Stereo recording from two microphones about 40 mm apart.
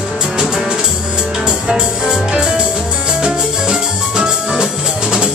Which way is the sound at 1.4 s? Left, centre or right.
Centre.